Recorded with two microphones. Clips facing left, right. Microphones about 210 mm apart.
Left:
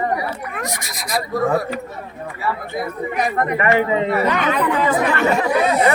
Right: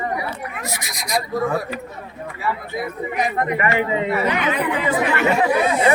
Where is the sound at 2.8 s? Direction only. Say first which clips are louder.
Left 2 dB; 50° left (ahead or behind).